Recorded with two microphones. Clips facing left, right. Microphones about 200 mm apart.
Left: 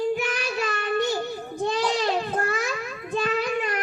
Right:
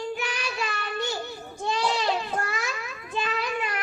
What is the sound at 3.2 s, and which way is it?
Child singing, 45° left (ahead or behind).